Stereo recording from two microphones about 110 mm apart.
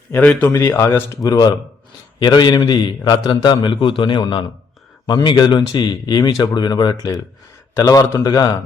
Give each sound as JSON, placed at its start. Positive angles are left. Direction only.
{"t": 0.1, "sound": "a man's voice", "side_deg": 10}
{"t": 1.2, "sound": "a man's voice", "side_deg": 35}